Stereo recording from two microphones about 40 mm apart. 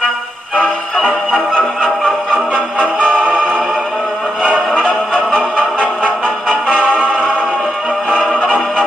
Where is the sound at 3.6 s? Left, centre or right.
Centre.